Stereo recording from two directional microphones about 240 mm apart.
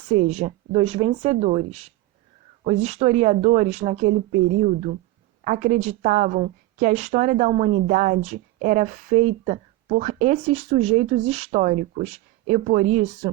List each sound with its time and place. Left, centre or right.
0.1 s a woman's voice: right